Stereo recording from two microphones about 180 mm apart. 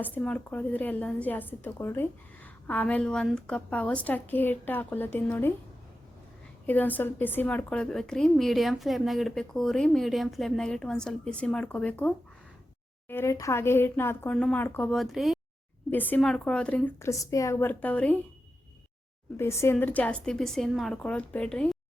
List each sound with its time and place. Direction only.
0.0 s a woman's voice: 10° left (ahead or behind)
6.7 s a woman's voice: 10° left (ahead or behind)
15.9 s a woman's voice: 10° left (ahead or behind)
19.4 s a woman's voice: 15° left (ahead or behind)